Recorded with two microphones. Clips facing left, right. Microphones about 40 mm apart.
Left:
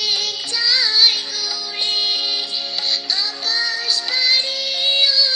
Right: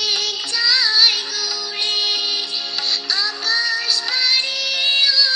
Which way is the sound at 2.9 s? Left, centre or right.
Centre.